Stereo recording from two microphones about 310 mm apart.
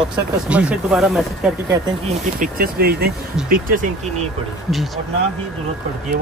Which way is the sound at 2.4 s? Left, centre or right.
Right.